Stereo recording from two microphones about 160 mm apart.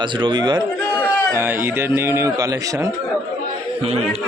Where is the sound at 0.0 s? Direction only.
30° right (ahead or behind).